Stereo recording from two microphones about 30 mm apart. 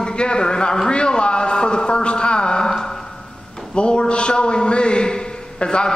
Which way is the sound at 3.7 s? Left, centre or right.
Left.